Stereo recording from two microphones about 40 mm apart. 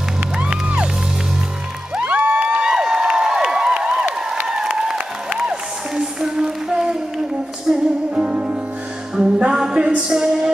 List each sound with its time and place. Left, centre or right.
0.4 s music: right
2.0 s music: right
2.7 s a sound: centre
4.5 s music: centre